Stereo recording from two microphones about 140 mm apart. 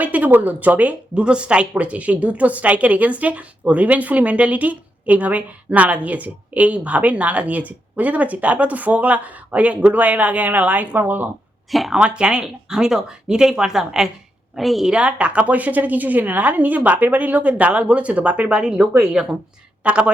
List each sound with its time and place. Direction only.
0.0 s speech: 10° right (ahead or behind)
11.7 s a woman's voice: centre (ahead or behind)